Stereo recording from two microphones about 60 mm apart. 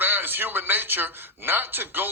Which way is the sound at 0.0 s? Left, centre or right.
Right.